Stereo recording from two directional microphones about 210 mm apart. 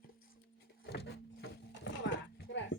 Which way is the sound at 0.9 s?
50° left (ahead or behind).